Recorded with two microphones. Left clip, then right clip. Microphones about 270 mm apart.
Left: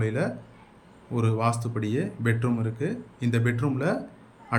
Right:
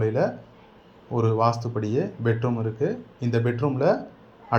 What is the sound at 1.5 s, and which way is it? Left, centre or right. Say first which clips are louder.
Speech: right 3 dB; centre.